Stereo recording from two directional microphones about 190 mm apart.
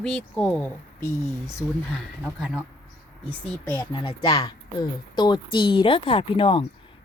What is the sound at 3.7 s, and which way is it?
Speech, 25° left (ahead or behind).